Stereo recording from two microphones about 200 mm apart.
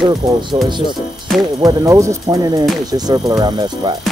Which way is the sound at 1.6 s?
20° right (ahead or behind).